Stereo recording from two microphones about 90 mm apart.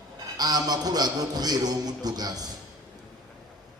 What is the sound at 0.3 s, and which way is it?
A man's voice, 45° right (ahead or behind).